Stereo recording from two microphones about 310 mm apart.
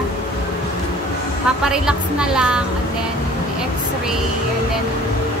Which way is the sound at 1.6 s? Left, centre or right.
Centre.